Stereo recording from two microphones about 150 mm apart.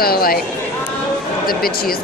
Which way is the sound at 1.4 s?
80° left.